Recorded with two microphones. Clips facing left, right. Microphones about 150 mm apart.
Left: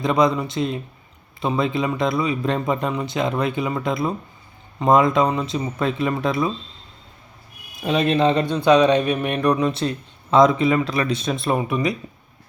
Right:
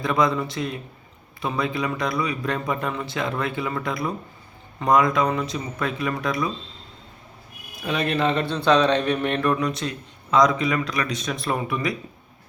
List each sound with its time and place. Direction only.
0.0 s speech: 20° left (ahead or behind)
7.9 s speech: 20° left (ahead or behind)